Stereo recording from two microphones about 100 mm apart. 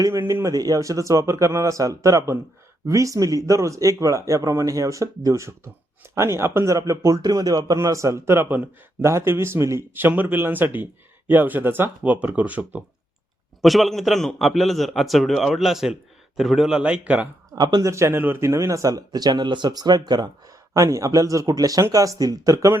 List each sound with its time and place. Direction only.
0.0 s a man's voice: 30° right (ahead or behind)
13.6 s a man's voice: centre (ahead or behind)
17.5 s speech: 45° right (ahead or behind)
17.8 s speech: 30° right (ahead or behind)